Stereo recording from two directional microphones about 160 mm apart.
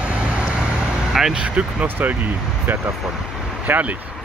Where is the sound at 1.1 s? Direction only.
5° right (ahead or behind).